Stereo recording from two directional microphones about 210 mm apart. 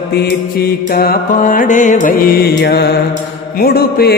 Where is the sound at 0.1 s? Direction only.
50° left (ahead or behind).